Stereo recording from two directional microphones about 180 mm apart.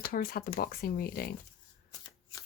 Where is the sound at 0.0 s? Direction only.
55° left (ahead or behind).